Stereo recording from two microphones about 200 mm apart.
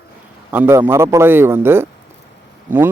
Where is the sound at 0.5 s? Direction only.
10° right (ahead or behind).